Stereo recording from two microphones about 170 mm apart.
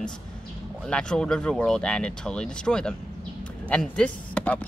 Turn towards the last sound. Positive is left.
turn(degrees=5)  # may be behind; listen again after turning